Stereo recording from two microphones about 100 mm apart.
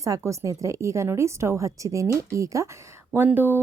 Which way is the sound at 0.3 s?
35° right (ahead or behind).